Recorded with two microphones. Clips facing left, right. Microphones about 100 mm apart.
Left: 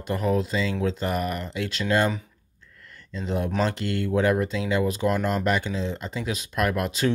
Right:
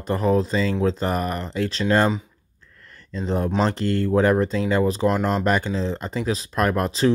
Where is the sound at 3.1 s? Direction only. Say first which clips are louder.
Right 3 dB; 40° right (ahead or behind).